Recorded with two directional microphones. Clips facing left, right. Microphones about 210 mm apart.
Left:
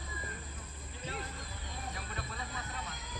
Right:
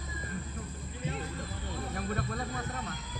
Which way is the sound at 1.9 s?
50° right (ahead or behind).